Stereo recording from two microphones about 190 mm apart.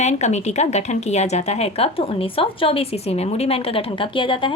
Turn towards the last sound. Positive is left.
turn(degrees=25)  # may be behind; listen again after turning